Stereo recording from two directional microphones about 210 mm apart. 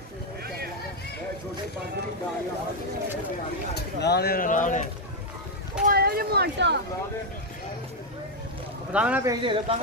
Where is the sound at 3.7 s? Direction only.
50° left (ahead or behind).